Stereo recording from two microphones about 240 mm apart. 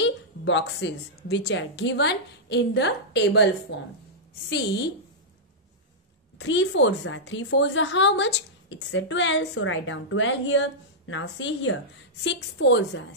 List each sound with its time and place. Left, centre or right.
0.0 s a woman's voice: left
6.3 s a woman's voice: left